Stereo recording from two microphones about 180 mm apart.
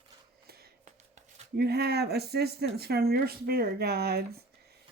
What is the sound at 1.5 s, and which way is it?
Speech, 65° right (ahead or behind).